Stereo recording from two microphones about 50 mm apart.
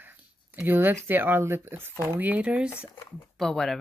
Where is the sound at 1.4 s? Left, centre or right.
Right.